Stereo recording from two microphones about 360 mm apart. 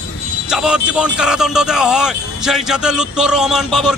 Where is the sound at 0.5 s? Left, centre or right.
Centre.